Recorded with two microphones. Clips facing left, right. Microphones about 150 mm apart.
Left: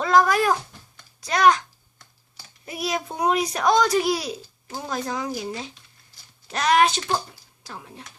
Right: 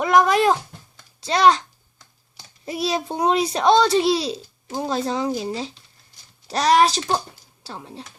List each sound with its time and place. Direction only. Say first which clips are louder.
0.0 s a child's voice: right 2 dB; 20° right (ahead or behind)
2.6 s a child's voice: right 4 dB; 30° right (ahead or behind)